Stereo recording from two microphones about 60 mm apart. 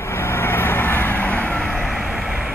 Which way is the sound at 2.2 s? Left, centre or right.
Centre.